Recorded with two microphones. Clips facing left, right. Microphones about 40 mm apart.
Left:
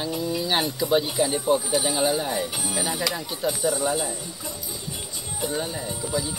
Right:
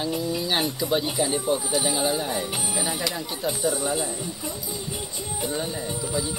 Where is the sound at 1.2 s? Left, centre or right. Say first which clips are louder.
Left 1 dB; left.